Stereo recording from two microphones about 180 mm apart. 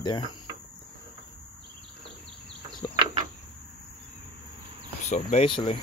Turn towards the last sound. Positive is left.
turn(degrees=25)  # may be behind; listen again after turning